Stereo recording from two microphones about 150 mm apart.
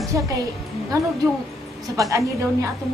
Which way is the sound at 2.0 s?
20° right (ahead or behind).